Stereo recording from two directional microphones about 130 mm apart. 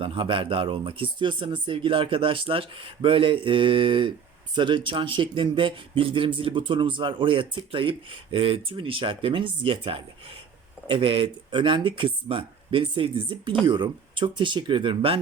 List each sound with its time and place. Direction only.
0.0 s speech: 40° right (ahead or behind)